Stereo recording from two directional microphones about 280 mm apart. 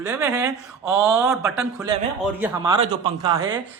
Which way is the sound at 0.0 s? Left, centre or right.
Centre.